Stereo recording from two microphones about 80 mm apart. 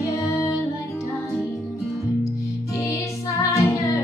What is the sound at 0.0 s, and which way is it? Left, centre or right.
Music, left.